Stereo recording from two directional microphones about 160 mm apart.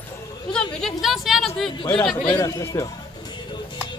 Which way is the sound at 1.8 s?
30° left (ahead or behind).